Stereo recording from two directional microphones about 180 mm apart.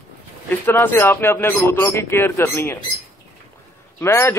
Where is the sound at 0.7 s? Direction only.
10° left (ahead or behind).